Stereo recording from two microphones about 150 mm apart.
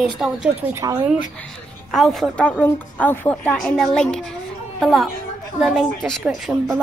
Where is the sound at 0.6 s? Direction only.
15° right (ahead or behind).